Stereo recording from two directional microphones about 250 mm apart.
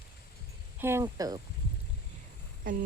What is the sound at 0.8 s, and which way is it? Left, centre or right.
Speech, centre.